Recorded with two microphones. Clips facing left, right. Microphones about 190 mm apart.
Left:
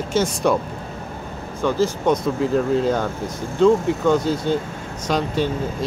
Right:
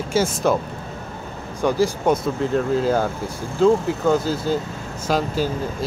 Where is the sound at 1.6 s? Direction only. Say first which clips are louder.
Even; 10° right (ahead or behind).